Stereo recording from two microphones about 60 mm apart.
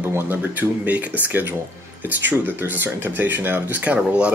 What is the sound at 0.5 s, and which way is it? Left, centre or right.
Speech, right.